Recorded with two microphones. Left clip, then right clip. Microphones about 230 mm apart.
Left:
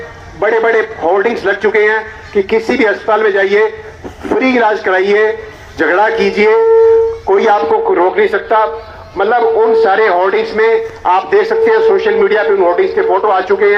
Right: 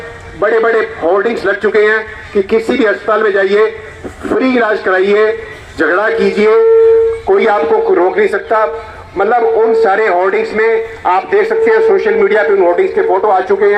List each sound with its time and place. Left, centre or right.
0.3 s a man's voice: right